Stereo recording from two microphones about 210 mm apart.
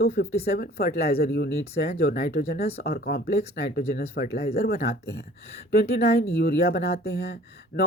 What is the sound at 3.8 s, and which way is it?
Speech, 30° left (ahead or behind).